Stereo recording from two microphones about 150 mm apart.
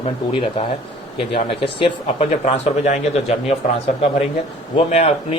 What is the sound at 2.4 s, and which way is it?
Speech, 50° left (ahead or behind).